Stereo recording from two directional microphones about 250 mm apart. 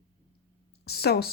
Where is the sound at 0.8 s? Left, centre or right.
Left.